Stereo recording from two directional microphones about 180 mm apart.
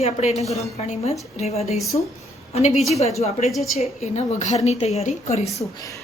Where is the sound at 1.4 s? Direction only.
35° left (ahead or behind).